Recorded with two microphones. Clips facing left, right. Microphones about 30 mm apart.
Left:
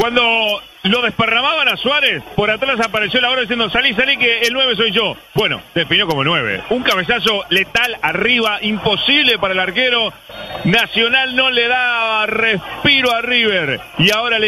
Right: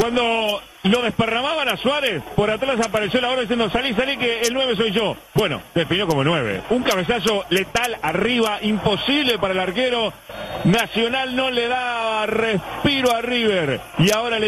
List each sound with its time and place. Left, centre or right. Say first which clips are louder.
0.0 s speech: left 5 dB; left
4.7 s speech: left 4 dB; left
6.4 s speech: left 3 dB; centre
6.8 s speech: left 6 dB; left
12.8 s a man's voice: left 6 dB; left
13.6 s speech: left 3 dB; centre
14.0 s speech: left 5 dB; left